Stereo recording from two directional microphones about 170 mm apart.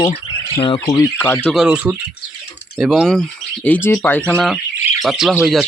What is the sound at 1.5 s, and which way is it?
Speech, 5° right (ahead or behind).